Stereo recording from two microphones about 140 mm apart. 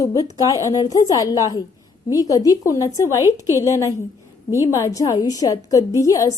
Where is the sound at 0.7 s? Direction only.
25° left (ahead or behind).